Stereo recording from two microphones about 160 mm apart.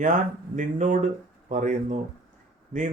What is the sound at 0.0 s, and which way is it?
Speech, 50° right (ahead or behind).